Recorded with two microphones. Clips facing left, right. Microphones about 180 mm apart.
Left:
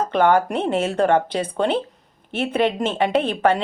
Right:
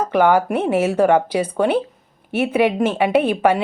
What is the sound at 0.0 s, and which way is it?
A woman's voice, 10° right (ahead or behind).